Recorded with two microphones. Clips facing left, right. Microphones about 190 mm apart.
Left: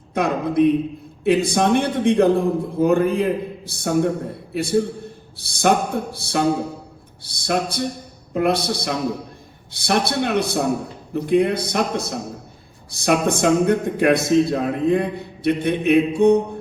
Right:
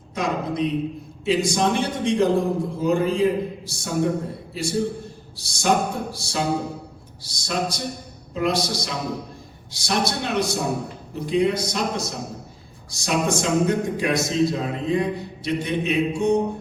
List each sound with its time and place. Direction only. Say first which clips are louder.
0.1 s speech: left 4 dB; 55° left (ahead or behind)